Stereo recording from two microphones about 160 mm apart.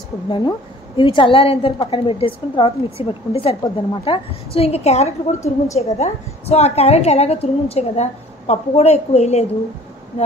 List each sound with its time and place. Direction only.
0.3 s a woman's voice: 30° left (ahead or behind)